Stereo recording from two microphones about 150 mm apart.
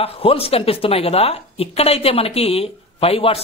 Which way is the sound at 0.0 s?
40° left (ahead or behind).